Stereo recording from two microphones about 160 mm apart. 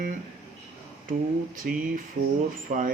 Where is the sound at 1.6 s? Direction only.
60° right (ahead or behind).